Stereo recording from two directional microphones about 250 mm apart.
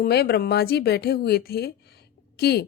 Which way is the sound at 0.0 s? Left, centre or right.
Left.